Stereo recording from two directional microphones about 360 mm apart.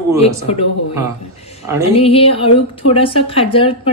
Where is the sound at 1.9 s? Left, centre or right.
Centre.